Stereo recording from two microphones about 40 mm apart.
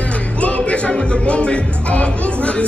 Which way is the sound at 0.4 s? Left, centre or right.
Left.